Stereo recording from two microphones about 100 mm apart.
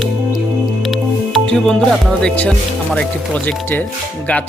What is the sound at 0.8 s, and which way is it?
Music, centre (ahead or behind).